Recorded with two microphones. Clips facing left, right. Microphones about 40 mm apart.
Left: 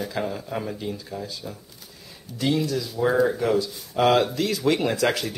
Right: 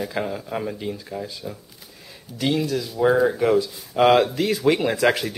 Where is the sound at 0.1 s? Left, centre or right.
Centre.